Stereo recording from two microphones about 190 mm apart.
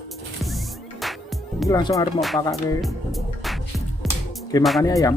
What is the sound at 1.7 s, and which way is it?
Music, 20° left (ahead or behind).